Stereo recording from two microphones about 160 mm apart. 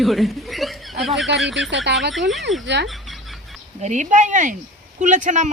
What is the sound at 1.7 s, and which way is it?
Speech, 90° right.